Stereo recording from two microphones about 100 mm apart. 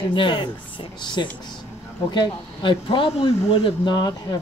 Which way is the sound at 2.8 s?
70° left (ahead or behind).